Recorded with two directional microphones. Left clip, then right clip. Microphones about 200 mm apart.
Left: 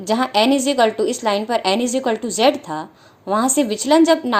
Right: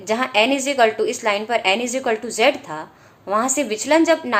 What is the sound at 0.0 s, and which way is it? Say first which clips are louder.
A woman's voice: left 1 dB; 35° left (ahead or behind).